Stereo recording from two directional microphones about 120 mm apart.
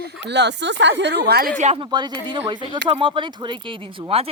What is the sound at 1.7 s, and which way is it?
A woman's voice, 40° right (ahead or behind).